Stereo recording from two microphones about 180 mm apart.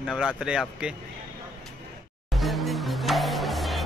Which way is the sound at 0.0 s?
5° right (ahead or behind).